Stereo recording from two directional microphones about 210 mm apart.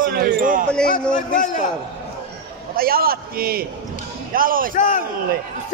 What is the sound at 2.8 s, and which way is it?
A man's voice, 45° right (ahead or behind).